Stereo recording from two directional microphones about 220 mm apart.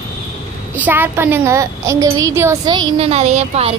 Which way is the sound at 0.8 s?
10° right (ahead or behind).